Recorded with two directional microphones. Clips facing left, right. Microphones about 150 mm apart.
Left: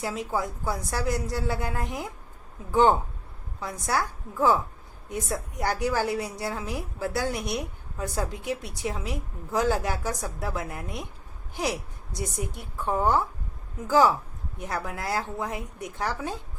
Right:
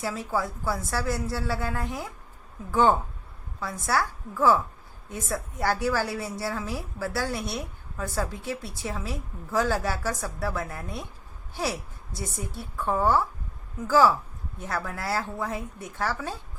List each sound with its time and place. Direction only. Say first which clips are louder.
0.0 s a woman's voice: even; 20° left (ahead or behind)
3.6 s a woman's voice: right 1 dB; 20° left (ahead or behind)